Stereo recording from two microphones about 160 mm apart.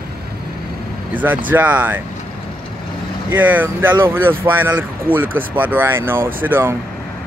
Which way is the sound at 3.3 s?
10° right (ahead or behind).